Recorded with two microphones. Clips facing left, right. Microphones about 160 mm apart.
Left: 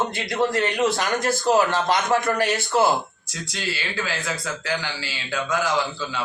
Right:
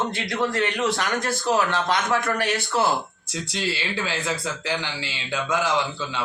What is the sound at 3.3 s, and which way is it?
Speech, 30° right (ahead or behind).